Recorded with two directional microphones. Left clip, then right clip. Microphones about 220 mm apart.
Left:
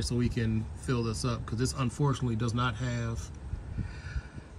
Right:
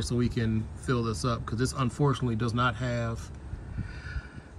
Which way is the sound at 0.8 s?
15° left (ahead or behind).